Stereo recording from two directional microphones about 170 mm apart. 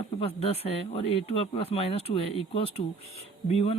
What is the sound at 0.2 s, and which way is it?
Speech, 35° left (ahead or behind).